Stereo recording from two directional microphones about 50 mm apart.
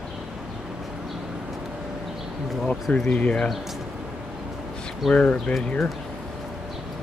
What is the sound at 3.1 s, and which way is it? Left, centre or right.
Speech, left.